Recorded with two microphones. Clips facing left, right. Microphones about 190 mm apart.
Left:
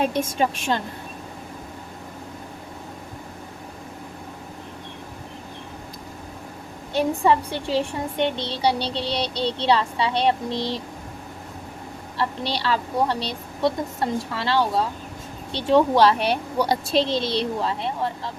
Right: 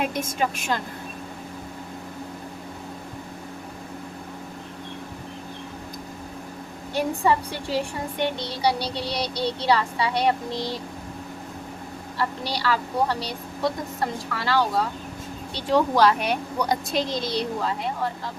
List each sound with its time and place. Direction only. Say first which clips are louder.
0.0 s a woman's voice: left 3 dB; 30° left (ahead or behind)
6.9 s a woman's voice: left 3 dB; 25° left (ahead or behind)
12.1 s a woman's voice: left 2 dB; 25° left (ahead or behind)